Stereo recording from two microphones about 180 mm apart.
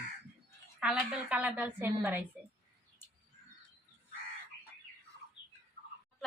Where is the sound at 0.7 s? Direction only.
5° right (ahead or behind).